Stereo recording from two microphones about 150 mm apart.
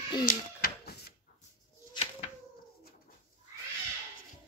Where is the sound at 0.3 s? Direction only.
85° left.